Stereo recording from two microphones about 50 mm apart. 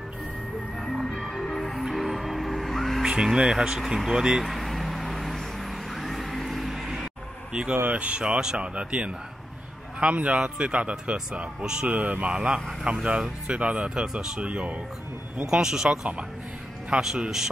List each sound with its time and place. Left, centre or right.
0.7 s music: centre
3.0 s speech: centre
4.5 s vehicle: centre
7.9 s speech: right
11.9 s speech: right
15.4 s speech: centre